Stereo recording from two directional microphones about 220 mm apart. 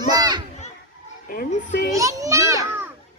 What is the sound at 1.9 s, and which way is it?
Speech, 15° right (ahead or behind).